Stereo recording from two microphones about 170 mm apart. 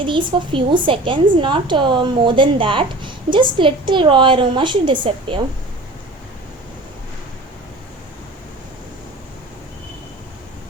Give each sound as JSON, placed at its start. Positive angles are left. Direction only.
{"t": 0.0, "sound": "a woman's voice", "side_deg": -30}